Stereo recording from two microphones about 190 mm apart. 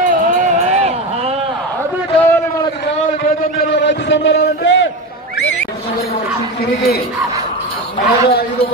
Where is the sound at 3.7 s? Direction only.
70° left (ahead or behind).